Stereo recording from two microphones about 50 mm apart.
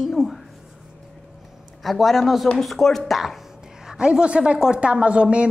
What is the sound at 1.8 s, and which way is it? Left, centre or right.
Speech, centre.